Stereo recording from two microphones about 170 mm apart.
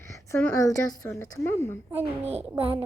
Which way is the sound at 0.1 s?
15° left (ahead or behind).